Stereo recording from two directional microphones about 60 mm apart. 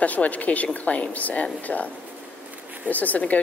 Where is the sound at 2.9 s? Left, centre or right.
Left.